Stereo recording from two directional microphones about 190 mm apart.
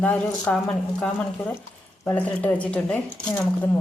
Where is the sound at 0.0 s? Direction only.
5° left (ahead or behind).